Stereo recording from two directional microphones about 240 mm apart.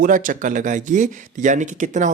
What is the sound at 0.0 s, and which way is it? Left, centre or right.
Speech, right.